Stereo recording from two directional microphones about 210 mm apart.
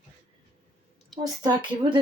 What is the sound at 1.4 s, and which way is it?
Speech, 20° right (ahead or behind).